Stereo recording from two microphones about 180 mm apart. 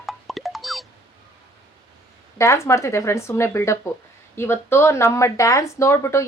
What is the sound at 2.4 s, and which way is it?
Speech, 15° left (ahead or behind).